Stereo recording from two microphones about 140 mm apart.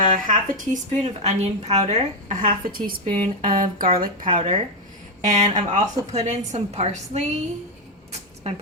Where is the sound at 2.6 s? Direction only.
90° right.